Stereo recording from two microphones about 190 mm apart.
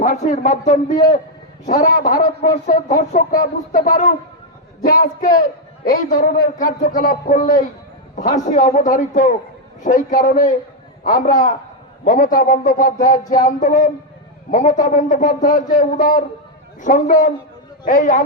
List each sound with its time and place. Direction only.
0.0 s a man's voice: 40° left (ahead or behind)
3.7 s a man's voice: 50° left (ahead or behind)